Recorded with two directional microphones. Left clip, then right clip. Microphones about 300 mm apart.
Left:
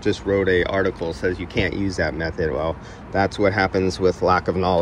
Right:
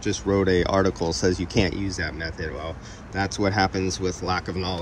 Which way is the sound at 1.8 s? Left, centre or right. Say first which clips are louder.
Left 6 dB; centre.